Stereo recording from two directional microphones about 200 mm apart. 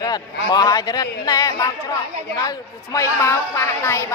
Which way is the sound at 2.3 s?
15° left (ahead or behind).